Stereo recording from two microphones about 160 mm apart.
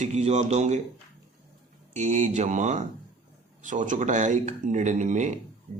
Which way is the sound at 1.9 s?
50° right (ahead or behind).